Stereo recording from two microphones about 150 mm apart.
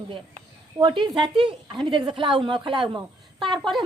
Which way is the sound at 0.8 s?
30° right (ahead or behind).